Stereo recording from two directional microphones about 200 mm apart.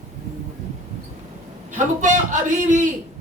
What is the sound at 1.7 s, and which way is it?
A man's voice, 40° right (ahead or behind).